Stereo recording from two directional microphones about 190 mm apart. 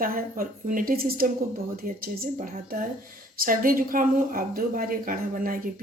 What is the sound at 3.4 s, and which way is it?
Speech, 45° right (ahead or behind).